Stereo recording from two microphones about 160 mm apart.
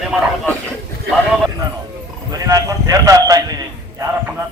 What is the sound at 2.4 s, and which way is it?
Clip-clop, 20° right (ahead or behind).